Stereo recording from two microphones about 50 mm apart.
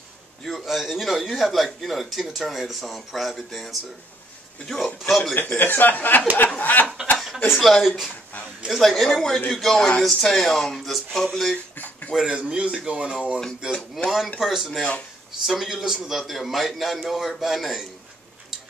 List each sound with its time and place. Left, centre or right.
0.7 s speech: centre
5.3 s speech: left
7.5 s speech: centre
11.7 s a sound: left
12.3 s speech: centre
14.0 s speech: centre